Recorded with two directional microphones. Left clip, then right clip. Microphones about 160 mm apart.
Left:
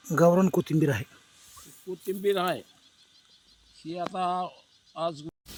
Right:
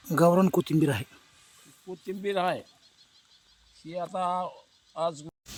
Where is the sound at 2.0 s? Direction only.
30° right (ahead or behind).